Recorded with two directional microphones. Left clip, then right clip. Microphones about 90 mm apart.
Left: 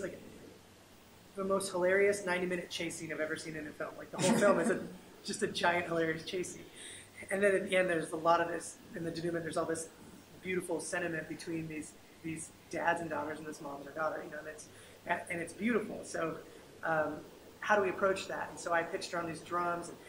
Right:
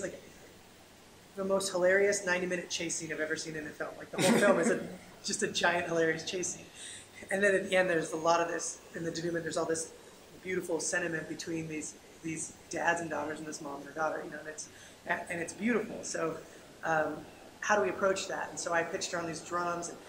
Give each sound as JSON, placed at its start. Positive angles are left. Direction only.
{"t": 1.4, "sound": "speech", "side_deg": -5}
{"t": 4.1, "sound": "a man's voice", "side_deg": -20}
{"t": 5.2, "sound": "speech", "side_deg": -5}
{"t": 12.7, "sound": "speech", "side_deg": -5}